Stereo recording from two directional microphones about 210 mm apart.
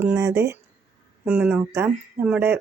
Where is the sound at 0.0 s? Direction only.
10° right (ahead or behind).